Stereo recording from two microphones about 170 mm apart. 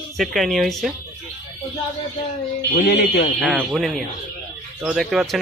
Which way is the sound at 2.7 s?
70° left (ahead or behind).